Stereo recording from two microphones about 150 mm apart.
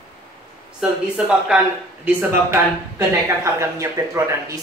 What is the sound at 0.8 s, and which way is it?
Speech, 5° right (ahead or behind).